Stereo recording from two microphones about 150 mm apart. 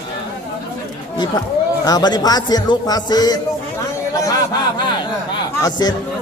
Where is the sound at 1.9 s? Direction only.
25° left (ahead or behind).